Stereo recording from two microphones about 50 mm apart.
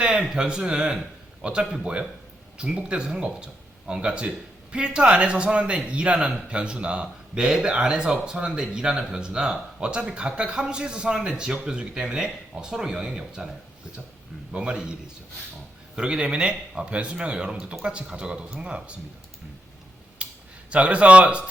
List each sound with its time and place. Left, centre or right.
0.0 s speech: centre
14.5 s speech: centre
16.0 s speech: centre
20.2 s a sound: right
20.7 s speech: right